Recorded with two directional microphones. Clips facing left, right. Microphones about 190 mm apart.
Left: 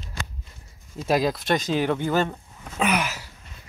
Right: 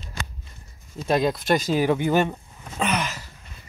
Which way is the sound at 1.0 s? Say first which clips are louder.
Right 1 dB; centre (ahead or behind).